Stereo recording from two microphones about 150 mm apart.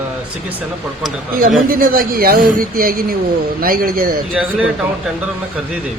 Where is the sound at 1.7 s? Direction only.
70° right (ahead or behind).